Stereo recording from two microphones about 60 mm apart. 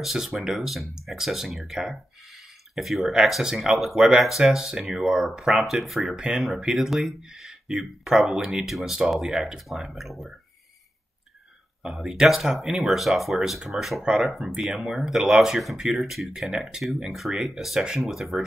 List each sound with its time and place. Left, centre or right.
0.0 s speech: centre
11.8 s speech: centre